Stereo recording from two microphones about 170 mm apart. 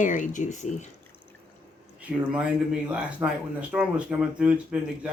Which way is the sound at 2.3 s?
5° right (ahead or behind).